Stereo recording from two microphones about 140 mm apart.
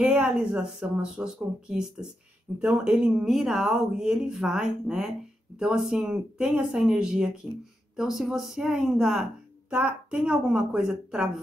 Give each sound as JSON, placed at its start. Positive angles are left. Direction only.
{"t": 0.0, "sound": "speech", "side_deg": -5}